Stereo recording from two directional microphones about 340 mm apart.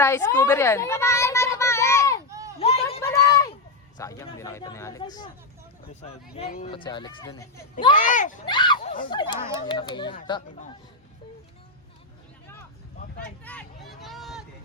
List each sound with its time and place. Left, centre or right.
0.0 s children playing: centre
2.3 s a sound: centre
2.6 s a sound: centre
3.9 s speech: centre
7.9 s speech: left
13.4 s vehicle: centre